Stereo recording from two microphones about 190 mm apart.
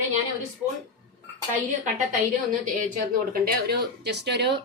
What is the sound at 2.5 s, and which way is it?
Speech, 45° right (ahead or behind).